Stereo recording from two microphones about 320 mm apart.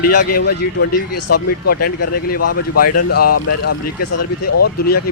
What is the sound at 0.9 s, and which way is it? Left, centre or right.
Speech, left.